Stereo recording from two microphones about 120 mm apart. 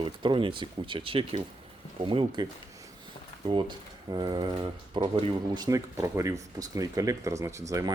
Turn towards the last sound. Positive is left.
turn(degrees=-25)  # may be behind; listen again after turning